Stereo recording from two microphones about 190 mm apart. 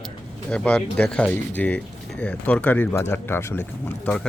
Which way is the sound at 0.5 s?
5° left (ahead or behind).